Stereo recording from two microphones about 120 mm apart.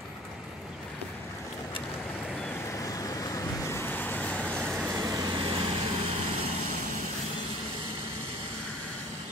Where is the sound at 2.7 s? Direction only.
30° left (ahead or behind); by 4.8 s 5° left (ahead or behind).